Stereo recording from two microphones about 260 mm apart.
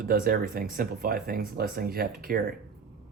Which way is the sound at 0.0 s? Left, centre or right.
Right.